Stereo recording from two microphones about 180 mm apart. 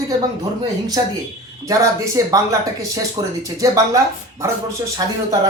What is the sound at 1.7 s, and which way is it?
Speech, 15° right (ahead or behind).